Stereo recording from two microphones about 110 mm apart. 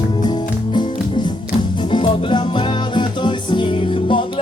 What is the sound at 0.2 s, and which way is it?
Music, 40° left (ahead or behind).